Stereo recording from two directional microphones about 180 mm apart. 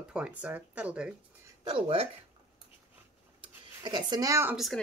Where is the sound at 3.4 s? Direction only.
25° right (ahead or behind).